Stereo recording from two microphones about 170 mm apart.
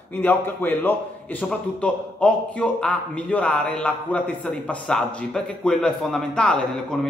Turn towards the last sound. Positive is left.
turn(degrees=5)  # may be behind; listen again after turning